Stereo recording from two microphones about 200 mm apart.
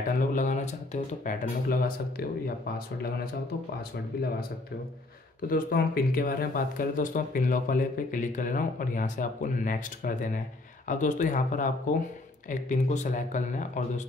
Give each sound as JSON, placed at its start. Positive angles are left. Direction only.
{"t": 0.3, "sound": "speech", "side_deg": 40}
{"t": 3.9, "sound": "speech", "side_deg": 50}
{"t": 5.5, "sound": "speech", "side_deg": 45}